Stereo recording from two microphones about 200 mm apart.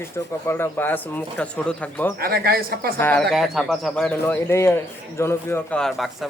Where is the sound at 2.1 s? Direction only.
50° right (ahead or behind).